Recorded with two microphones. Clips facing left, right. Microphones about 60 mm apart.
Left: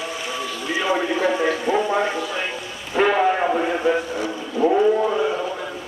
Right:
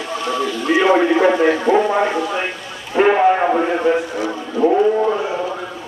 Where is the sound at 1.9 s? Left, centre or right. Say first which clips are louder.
Right 4 dB; right.